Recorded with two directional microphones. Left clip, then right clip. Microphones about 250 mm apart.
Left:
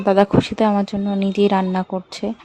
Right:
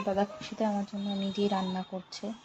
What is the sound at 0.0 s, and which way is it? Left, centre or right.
A woman's voice, left.